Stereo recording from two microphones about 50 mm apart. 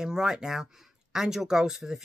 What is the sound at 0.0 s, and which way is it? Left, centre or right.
Speech, centre.